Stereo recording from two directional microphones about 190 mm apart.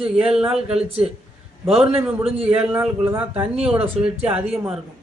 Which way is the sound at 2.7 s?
10° right (ahead or behind).